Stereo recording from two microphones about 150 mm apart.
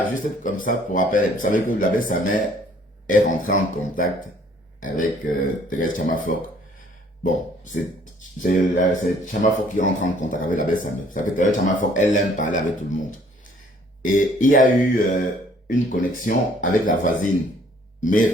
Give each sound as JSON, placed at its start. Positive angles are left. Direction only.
{"t": 0.2, "sound": "speech", "side_deg": 65}
{"t": 8.4, "sound": "speech", "side_deg": 65}